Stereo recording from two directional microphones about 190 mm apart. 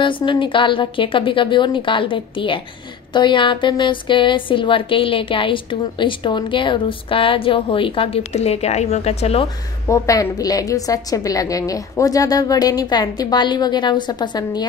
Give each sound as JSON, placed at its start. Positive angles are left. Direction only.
{"t": 0.0, "sound": "a woman's voice", "side_deg": 25}
{"t": 9.8, "sound": "a woman's voice", "side_deg": 15}